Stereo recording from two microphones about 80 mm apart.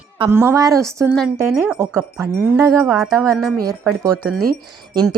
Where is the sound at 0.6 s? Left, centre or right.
Right.